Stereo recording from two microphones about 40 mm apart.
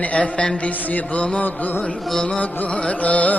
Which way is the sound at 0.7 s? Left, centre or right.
Left.